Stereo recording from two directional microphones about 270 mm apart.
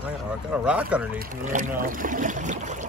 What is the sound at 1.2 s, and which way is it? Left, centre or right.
Speech, right.